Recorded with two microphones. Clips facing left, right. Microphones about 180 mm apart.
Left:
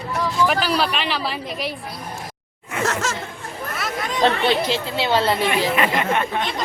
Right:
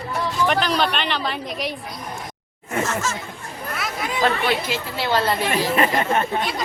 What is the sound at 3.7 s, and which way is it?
Chatter, 5° right (ahead or behind).